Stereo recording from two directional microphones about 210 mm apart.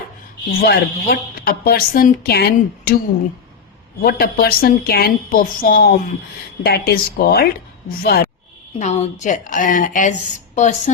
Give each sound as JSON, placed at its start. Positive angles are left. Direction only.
{"t": 0.6, "sound": "speech", "side_deg": 45}
{"t": 4.0, "sound": "speech", "side_deg": 45}
{"t": 8.8, "sound": "speech", "side_deg": 35}